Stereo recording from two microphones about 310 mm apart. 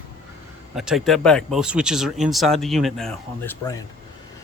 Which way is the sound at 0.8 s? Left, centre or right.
Centre.